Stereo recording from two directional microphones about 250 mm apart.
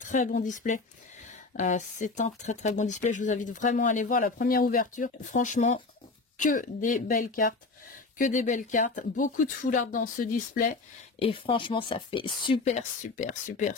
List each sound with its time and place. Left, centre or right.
0.0 s speech: left
11.1 s speech: left